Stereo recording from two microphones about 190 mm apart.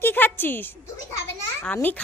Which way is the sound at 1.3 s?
10° left (ahead or behind).